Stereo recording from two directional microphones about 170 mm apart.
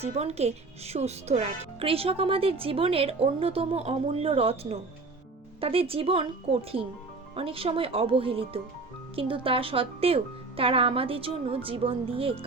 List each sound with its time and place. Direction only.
0.0 s speech: 40° right (ahead or behind)